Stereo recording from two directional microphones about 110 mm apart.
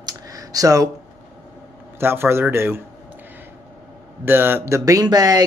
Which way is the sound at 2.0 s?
20° right (ahead or behind).